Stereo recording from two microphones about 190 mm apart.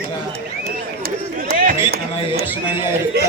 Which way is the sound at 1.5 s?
50° right (ahead or behind).